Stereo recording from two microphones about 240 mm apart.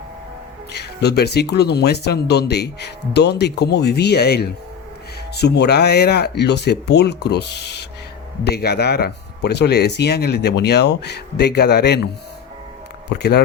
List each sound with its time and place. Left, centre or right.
0.7 s speech: left
13.1 s speech: left